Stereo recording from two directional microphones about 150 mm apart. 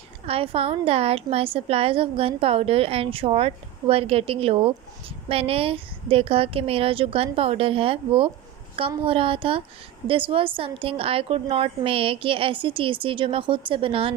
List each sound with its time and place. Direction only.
0.3 s a woman's voice: 40° right (ahead or behind)